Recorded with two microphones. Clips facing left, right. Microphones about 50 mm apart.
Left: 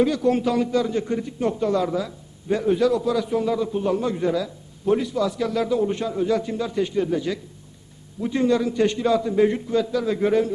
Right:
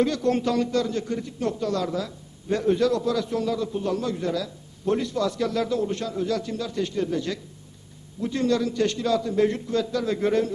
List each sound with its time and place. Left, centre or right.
0.0 s a man's voice: centre